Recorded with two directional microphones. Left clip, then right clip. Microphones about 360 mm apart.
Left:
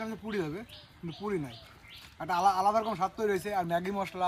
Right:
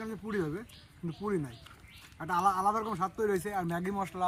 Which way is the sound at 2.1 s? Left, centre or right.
Centre.